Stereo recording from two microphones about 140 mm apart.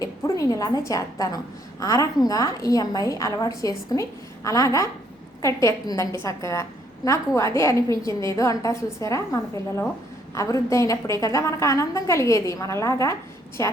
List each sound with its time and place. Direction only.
0.0 s a woman's voice: 25° left (ahead or behind)